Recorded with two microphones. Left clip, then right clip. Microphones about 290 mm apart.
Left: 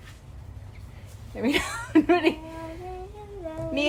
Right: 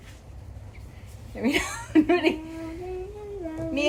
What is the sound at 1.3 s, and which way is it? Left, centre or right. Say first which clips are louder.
Speech: even; left.